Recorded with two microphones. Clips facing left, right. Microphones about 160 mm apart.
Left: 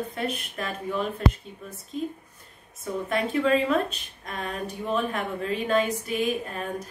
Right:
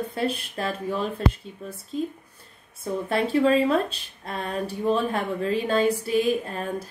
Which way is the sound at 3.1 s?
30° right (ahead or behind).